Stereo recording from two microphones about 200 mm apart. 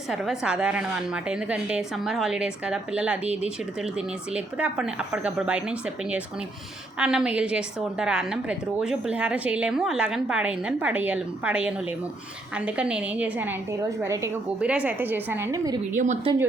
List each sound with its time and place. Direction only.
0.1 s a woman's voice: 5° right (ahead or behind)
16.0 s speech: 35° right (ahead or behind)